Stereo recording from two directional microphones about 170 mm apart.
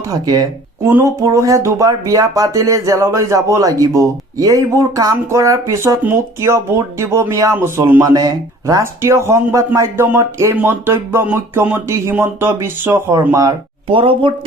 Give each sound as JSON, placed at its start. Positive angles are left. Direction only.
{"t": 0.1, "sound": "speech", "side_deg": -20}
{"t": 13.8, "sound": "speech", "side_deg": -30}